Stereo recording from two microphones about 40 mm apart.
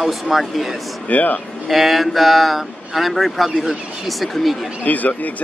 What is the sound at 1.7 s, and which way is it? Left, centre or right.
A man's voice, centre.